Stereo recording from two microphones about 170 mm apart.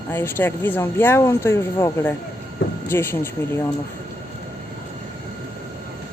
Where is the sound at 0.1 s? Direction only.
15° left (ahead or behind).